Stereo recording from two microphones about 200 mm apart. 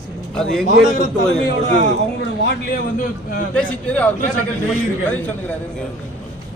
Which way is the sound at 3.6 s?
5° left (ahead or behind).